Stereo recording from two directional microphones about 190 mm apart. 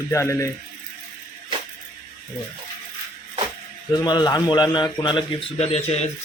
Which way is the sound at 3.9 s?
20° left (ahead or behind).